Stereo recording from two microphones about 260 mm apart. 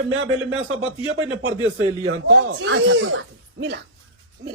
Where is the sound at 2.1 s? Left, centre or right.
Right.